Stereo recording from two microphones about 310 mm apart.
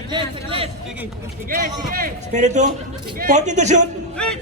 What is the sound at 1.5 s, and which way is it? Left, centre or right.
Speech, right.